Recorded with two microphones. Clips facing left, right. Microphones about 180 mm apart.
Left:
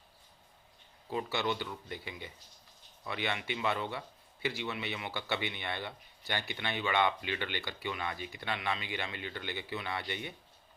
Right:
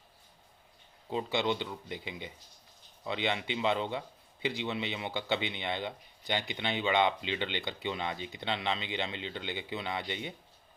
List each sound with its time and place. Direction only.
1.1 s a man's voice: 20° right (ahead or behind)